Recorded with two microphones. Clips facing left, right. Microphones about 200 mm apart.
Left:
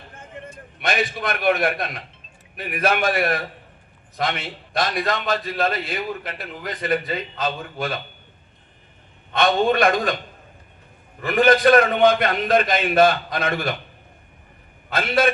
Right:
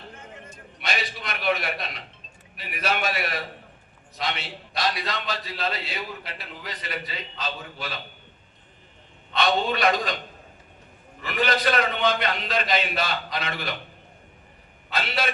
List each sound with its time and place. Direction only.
0.8 s a man's voice: 50° left (ahead or behind)
9.3 s a man's voice: 50° left (ahead or behind)
11.2 s a man's voice: 50° left (ahead or behind)
14.8 s a man's voice: 50° left (ahead or behind)